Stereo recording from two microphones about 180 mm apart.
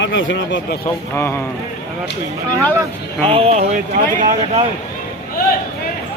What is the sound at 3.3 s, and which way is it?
Speech, 35° right (ahead or behind).